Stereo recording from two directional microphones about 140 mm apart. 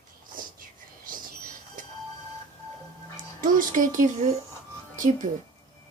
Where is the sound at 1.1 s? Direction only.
85° right.